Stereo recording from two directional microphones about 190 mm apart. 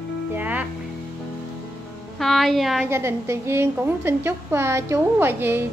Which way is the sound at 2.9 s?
15° right (ahead or behind).